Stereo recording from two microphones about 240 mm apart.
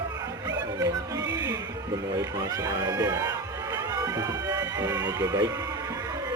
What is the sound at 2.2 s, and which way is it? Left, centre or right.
A man's voice, centre.